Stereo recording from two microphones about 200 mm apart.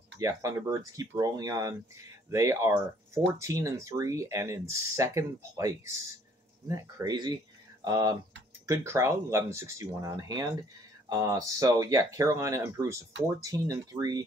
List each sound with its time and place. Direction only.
0.2 s speech: 15° right (ahead or behind)